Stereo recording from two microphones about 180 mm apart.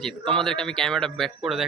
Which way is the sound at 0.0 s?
5° left (ahead or behind).